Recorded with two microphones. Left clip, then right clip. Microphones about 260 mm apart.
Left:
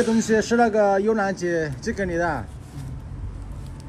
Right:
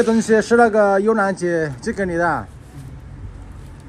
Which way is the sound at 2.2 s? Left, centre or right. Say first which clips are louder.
Right 8 dB; right.